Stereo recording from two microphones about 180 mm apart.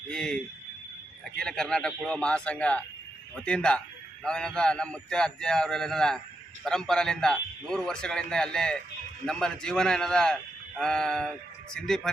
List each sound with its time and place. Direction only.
0.1 s speech: 5° left (ahead or behind)
1.4 s a man's voice: 5° left (ahead or behind)